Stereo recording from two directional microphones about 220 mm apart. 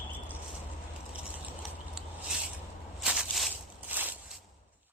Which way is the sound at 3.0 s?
5° right (ahead or behind).